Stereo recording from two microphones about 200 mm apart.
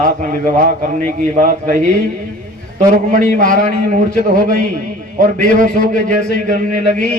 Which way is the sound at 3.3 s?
40° right (ahead or behind).